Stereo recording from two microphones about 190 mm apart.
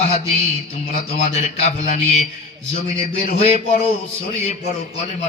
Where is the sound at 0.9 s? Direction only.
40° left (ahead or behind).